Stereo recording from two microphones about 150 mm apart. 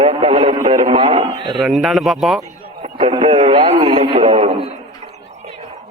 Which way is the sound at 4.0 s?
40° right (ahead or behind).